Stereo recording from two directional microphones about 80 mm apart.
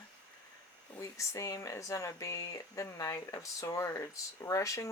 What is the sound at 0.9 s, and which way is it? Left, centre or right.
Speech, left.